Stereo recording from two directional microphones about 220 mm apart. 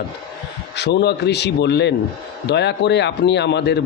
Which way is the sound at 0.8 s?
50° left (ahead or behind).